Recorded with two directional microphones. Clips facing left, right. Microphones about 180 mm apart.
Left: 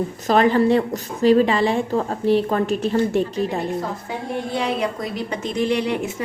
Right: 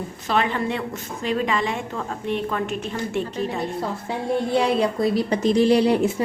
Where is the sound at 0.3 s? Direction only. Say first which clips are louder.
Left 7 dB; 40° left (ahead or behind).